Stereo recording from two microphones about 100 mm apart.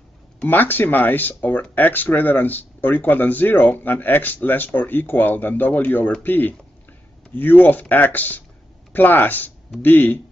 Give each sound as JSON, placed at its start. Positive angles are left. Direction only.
{"t": 0.5, "sound": "speech", "side_deg": 20}